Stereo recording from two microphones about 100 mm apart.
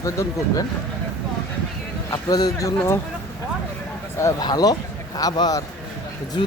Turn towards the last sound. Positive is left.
turn(degrees=50)  # may be behind; listen again after turning